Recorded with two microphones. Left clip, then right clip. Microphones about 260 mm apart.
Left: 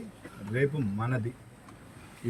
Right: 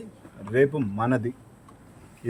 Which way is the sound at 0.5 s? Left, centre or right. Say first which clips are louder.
Right 8 dB; right.